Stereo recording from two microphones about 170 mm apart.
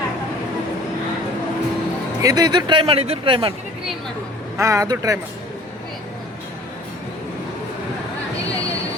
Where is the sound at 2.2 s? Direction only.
25° right (ahead or behind).